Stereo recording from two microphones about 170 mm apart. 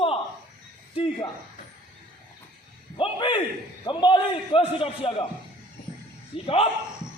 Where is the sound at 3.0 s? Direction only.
30° left (ahead or behind).